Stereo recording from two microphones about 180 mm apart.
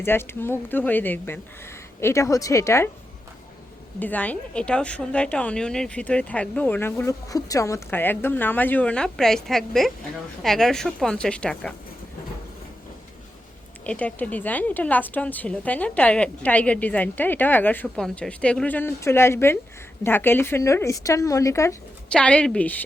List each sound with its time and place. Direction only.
0.0 s speech: 10° left (ahead or behind)
4.0 s a woman's voice: 10° left (ahead or behind)
13.8 s speech: 5° left (ahead or behind)
22.1 s speech: 5° left (ahead or behind)